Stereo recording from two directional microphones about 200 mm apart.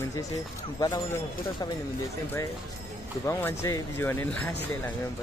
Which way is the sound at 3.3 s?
10° left (ahead or behind).